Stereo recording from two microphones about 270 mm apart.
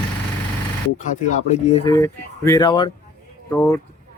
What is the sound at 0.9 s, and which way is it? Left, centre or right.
Speech, left.